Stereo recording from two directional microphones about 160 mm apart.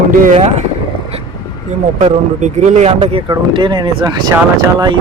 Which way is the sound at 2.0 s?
45° right (ahead or behind).